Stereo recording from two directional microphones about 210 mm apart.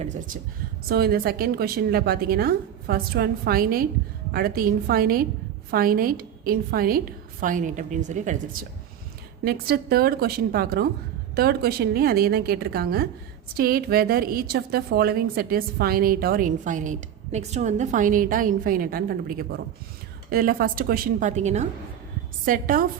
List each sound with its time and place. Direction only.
0.0 s a woman's voice: 35° right (ahead or behind)
0.9 s a woman's voice: 45° right (ahead or behind)
9.4 s a woman's voice: 45° right (ahead or behind)